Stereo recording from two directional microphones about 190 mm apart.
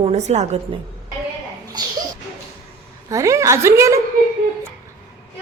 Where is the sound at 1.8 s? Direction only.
20° right (ahead or behind).